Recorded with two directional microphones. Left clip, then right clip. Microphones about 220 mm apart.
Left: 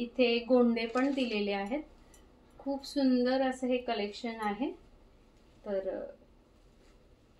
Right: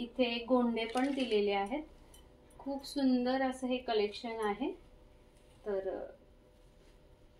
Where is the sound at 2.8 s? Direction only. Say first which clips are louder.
Left 3 dB; 30° left (ahead or behind).